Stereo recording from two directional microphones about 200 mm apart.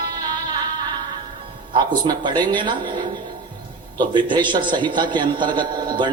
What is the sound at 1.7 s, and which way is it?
A man's voice, 20° right (ahead or behind).